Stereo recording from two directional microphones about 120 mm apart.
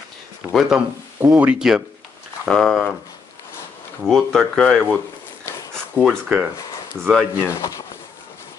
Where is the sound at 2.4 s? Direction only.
5° left (ahead or behind).